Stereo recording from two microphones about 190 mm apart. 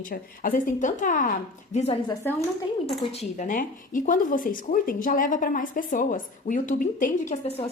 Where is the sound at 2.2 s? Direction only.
10° left (ahead or behind).